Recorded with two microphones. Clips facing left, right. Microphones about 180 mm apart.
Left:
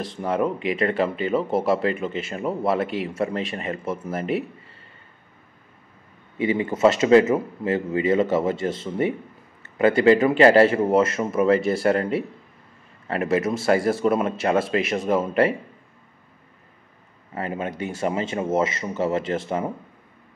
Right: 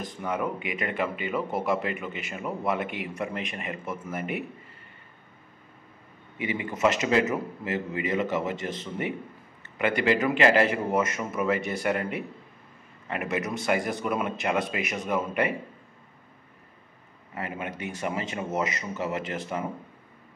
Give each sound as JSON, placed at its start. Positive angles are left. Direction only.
{"t": 0.2, "sound": "speech", "side_deg": 30}
{"t": 6.3, "sound": "speech", "side_deg": 30}
{"t": 17.3, "sound": "speech", "side_deg": 30}